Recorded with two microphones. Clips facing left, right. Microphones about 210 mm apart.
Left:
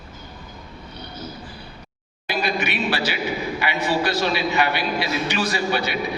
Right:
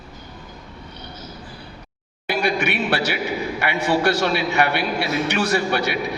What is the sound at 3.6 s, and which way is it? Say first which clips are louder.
A man's voice: right 4 dB; 65° right (ahead or behind).